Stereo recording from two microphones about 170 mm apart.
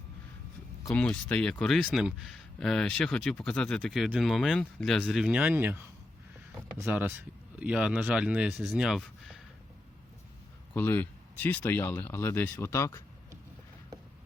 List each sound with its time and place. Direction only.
0.9 s speech: 5° left (ahead or behind)
6.7 s speech: 15° right (ahead or behind)
10.8 s speech: 10° left (ahead or behind)